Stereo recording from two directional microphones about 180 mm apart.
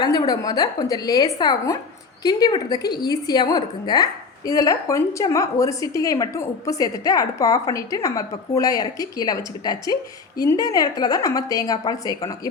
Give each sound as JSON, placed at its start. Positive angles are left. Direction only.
{"t": 0.0, "sound": "a woman's voice", "side_deg": 25}